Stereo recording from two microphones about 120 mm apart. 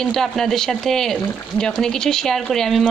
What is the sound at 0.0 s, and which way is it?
Speech, 5° left (ahead or behind).